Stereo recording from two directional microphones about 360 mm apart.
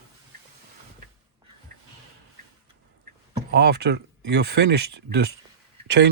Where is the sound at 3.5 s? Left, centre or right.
Right.